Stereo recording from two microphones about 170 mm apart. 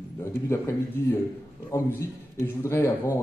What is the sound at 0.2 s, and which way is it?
A man's voice, 15° left (ahead or behind).